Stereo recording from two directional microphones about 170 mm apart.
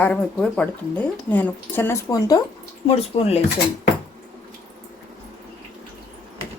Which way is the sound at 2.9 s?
35° left (ahead or behind).